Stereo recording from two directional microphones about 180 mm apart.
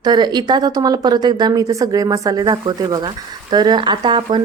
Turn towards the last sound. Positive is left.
turn(degrees=-25)  # may be behind; listen again after turning